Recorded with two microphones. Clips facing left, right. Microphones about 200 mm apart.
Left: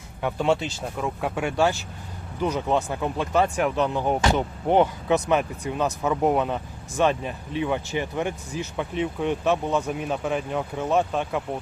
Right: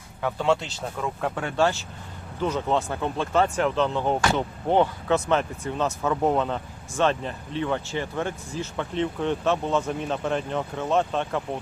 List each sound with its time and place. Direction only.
0.2 s speech: 15° left (ahead or behind)